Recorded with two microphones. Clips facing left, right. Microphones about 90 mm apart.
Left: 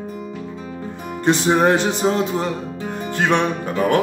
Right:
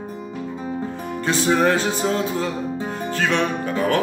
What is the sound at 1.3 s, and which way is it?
Music, 25° left (ahead or behind).